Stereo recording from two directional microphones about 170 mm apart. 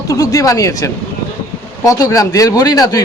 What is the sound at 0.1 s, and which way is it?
A man's voice, 20° left (ahead or behind).